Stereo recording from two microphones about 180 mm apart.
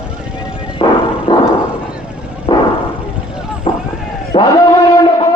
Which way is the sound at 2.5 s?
30° left (ahead or behind).